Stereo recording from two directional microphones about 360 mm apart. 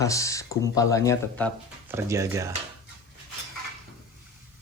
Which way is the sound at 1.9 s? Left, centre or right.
Centre.